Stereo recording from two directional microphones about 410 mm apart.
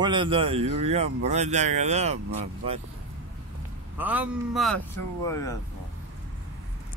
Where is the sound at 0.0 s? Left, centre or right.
Centre.